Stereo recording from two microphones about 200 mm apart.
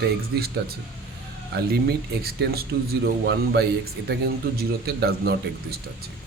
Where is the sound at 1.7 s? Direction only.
55° right (ahead or behind).